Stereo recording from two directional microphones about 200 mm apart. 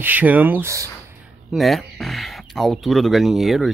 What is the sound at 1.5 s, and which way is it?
Speech, centre (ahead or behind).